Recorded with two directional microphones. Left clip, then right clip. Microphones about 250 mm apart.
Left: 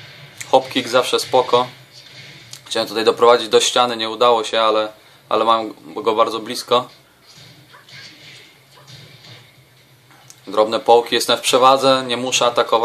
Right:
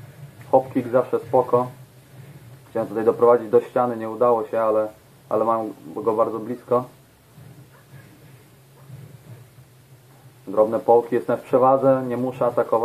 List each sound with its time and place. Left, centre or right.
0.5 s speech: left
2.7 s speech: left
10.5 s speech: left